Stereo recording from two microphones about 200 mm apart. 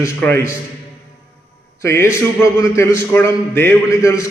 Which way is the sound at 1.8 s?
15° left (ahead or behind).